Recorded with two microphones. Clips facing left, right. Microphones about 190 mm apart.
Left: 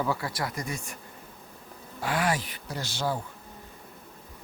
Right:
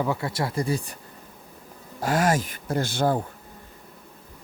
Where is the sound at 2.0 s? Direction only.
40° right (ahead or behind).